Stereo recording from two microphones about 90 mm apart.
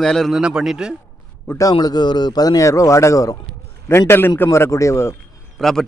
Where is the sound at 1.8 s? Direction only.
50° left (ahead or behind).